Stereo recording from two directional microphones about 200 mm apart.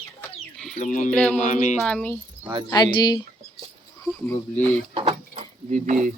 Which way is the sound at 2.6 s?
20° left (ahead or behind).